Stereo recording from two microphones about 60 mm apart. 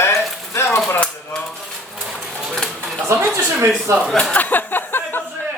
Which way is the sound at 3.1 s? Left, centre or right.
Right.